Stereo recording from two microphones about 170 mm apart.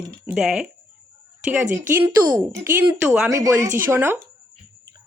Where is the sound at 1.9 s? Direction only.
10° right (ahead or behind).